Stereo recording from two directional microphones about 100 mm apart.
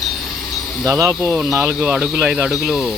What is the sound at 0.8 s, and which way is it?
Speech, 30° right (ahead or behind).